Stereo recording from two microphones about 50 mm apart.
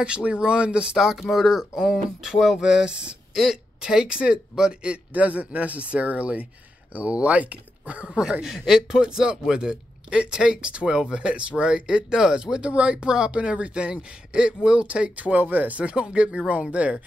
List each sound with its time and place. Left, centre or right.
0.0 s speech: right
0.9 s a man's voice: centre; by 8.1 s right
8.1 s a man's voice: centre; by 15.8 s right
15.8 s speech: right